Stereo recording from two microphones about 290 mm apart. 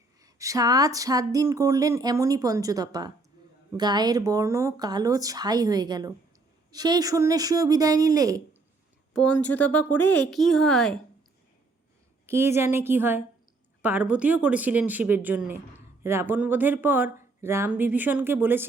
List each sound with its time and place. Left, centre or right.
0.2 s speech: centre
9.1 s speech: centre
12.3 s speech: centre